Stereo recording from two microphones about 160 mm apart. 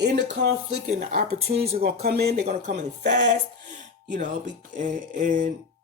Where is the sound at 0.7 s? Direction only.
45° right (ahead or behind).